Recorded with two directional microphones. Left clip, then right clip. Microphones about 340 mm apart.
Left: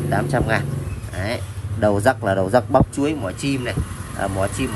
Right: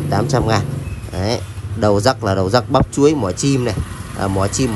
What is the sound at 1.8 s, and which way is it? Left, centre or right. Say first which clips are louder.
A man's voice: right 3 dB; left.